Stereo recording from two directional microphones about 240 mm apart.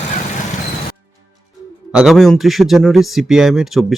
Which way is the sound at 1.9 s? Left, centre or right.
Centre.